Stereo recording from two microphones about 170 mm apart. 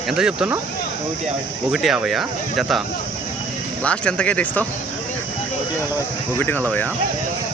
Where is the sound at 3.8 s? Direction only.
5° left (ahead or behind).